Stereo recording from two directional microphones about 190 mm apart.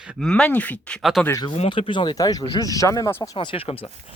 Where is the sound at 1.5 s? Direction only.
30° left (ahead or behind).